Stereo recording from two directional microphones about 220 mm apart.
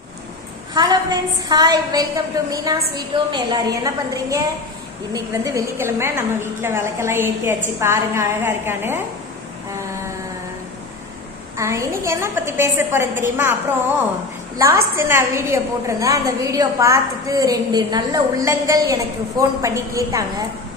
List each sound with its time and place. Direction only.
0.7 s a woman's voice: 20° right (ahead or behind)
11.5 s a woman's voice: 15° right (ahead or behind)
14.6 s a woman's voice: 15° right (ahead or behind)